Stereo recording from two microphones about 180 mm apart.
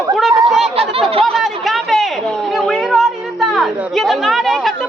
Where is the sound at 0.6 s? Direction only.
35° right (ahead or behind).